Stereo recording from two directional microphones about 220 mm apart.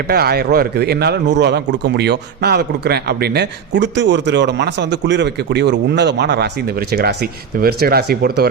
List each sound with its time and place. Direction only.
0.1 s a man's voice: 45° right (ahead or behind)